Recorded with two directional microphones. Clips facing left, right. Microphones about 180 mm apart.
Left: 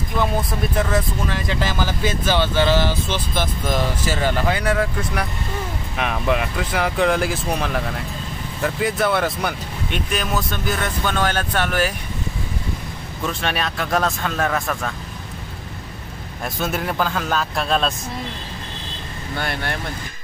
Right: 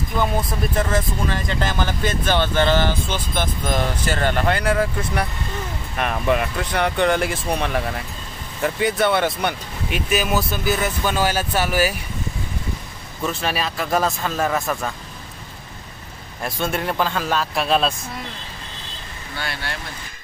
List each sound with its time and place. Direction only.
0.2 s speech: centre (ahead or behind)
13.2 s speech: centre (ahead or behind)
16.4 s speech: centre (ahead or behind)
19.3 s speech: 50° left (ahead or behind)